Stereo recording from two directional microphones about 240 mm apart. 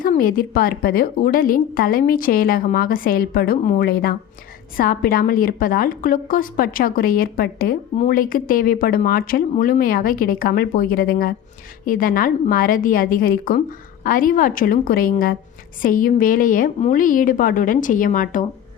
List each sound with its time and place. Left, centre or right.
0.0 s a woman's voice: left